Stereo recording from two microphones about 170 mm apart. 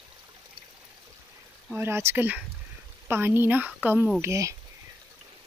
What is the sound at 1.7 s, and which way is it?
Speech, 15° right (ahead or behind).